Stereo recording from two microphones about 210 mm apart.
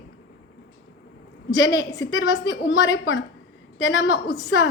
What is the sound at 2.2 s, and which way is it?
Speech, 60° left (ahead or behind).